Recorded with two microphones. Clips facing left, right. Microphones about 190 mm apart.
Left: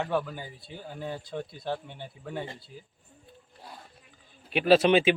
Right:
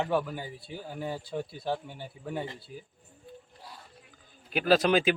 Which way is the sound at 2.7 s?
60° right (ahead or behind).